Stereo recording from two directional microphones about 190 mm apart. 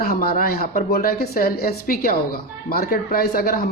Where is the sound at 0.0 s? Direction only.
50° left (ahead or behind).